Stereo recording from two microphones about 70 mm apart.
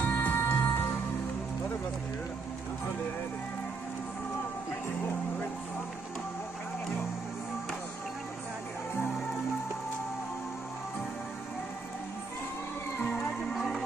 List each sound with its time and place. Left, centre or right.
0.0 s music: left
13.1 s music: centre
13.5 s music: centre